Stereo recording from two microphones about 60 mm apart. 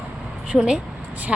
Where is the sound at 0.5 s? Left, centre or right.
Centre.